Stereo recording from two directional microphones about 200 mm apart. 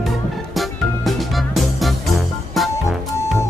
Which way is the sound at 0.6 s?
Centre (ahead or behind).